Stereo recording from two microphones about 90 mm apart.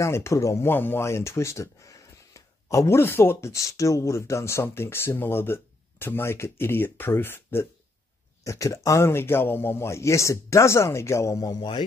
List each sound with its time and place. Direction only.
0.0 s speech: 30° left (ahead or behind)
8.5 s a man's voice: 35° left (ahead or behind)